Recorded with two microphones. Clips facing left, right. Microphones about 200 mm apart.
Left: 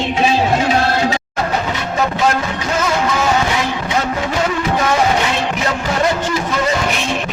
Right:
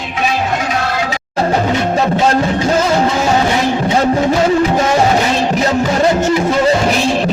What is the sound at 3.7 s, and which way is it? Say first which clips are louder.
Vehicle: right 6 dB; 35° right (ahead or behind).